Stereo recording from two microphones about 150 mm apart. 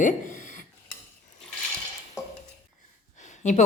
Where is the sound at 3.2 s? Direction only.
50° left (ahead or behind).